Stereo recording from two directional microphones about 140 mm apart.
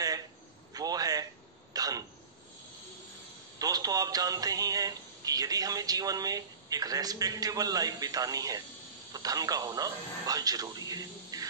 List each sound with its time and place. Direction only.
0.7 s a sound: 25° right (ahead or behind)
1.7 s throat clearing: 25° right (ahead or behind)
3.5 s speech: 25° right (ahead or behind)